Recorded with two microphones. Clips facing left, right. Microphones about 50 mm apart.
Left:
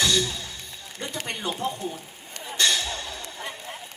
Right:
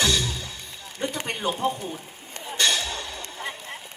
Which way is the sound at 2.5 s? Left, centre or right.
Right.